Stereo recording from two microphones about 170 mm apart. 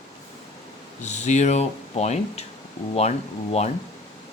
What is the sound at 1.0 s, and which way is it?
Speech, 45° left (ahead or behind).